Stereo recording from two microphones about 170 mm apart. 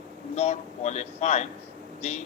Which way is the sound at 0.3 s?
40° left (ahead or behind).